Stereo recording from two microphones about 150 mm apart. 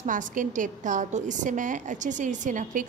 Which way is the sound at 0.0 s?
60° right (ahead or behind).